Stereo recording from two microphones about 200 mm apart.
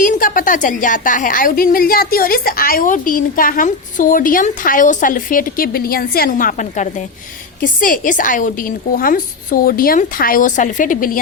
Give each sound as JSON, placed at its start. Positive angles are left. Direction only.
{"t": 0.0, "sound": "a woman's voice", "side_deg": 45}